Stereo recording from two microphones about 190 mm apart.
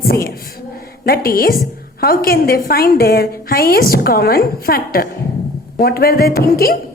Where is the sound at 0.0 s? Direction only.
55° left (ahead or behind).